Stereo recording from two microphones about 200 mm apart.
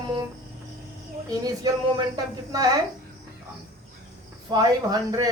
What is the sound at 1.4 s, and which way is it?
Speech, 20° right (ahead or behind).